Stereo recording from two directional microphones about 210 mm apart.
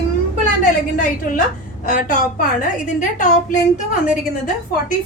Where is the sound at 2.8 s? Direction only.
35° left (ahead or behind).